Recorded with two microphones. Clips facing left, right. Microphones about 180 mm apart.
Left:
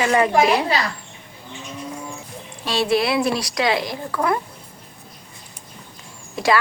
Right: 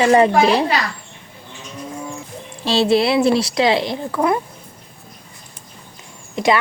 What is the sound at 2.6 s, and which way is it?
Speech, 25° right (ahead or behind).